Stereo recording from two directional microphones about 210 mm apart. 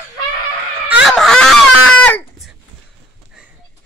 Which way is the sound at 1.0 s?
Centre (ahead or behind).